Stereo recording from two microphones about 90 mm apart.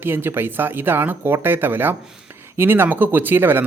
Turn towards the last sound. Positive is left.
turn(degrees=-25)  # may be behind; listen again after turning